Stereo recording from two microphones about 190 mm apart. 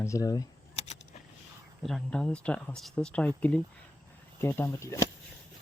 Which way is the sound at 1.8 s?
5° left (ahead or behind).